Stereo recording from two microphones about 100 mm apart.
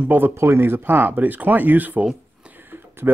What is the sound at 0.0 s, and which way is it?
Speech, 20° right (ahead or behind).